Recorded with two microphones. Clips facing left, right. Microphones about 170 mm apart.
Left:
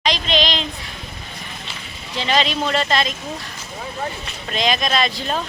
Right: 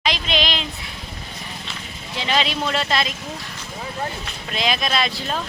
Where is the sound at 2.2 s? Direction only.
5° right (ahead or behind).